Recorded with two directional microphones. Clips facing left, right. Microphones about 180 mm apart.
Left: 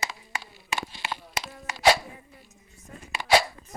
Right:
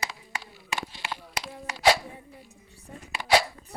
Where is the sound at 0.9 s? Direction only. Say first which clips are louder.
Left 1 dB; 25° left (ahead or behind).